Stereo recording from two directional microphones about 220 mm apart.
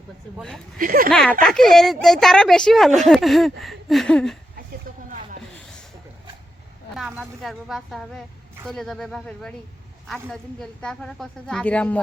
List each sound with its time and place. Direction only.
0.3 s speech: centre (ahead or behind)
0.8 s speech: 40° right (ahead or behind)
1.1 s speech: centre (ahead or behind)
6.9 s speech: centre (ahead or behind)